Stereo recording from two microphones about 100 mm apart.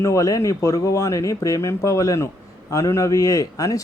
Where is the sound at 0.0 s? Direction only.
30° left (ahead or behind).